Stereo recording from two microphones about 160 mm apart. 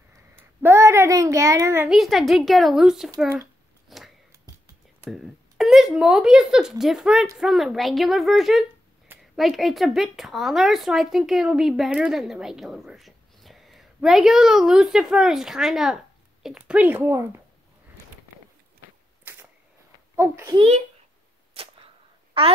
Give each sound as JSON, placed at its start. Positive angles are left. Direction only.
{"t": 0.4, "sound": "a child's voice", "side_deg": -15}
{"t": 1.9, "sound": "speech", "side_deg": 0}
{"t": 3.9, "sound": "a sound", "side_deg": 0}
{"t": 5.0, "sound": "speech", "side_deg": 0}
{"t": 19.3, "sound": "camera", "side_deg": -10}
{"t": 20.2, "sound": "speech", "side_deg": -15}
{"t": 20.5, "sound": "a child's voice", "side_deg": -40}
{"t": 21.5, "sound": "a sound", "side_deg": -35}